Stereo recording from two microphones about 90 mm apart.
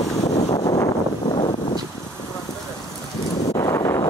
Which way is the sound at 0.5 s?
45° left (ahead or behind).